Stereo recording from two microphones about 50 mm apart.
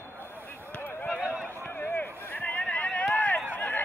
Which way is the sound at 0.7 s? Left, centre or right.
Left.